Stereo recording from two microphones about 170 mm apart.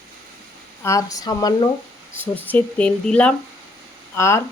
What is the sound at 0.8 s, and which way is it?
Speech, 20° left (ahead or behind).